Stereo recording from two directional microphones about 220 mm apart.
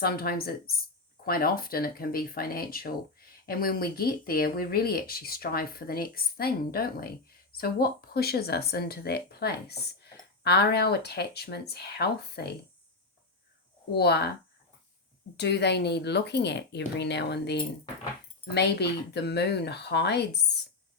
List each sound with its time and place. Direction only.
0.0 s speech: 45° left (ahead or behind)
13.9 s speech: 45° left (ahead or behind)
15.4 s speech: 50° left (ahead or behind)